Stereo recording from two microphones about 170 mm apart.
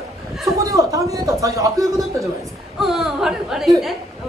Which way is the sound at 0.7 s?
20° right (ahead or behind).